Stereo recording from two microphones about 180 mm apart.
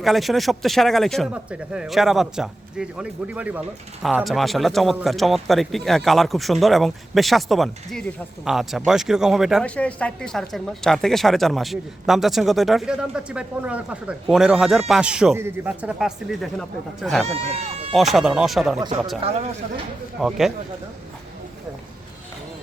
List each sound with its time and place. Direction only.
0.0 s speech: centre (ahead or behind)
17.2 s speech: 35° right (ahead or behind)
17.9 s speech: centre (ahead or behind)
19.2 s speech: 35° right (ahead or behind)
20.1 s speech: centre (ahead or behind)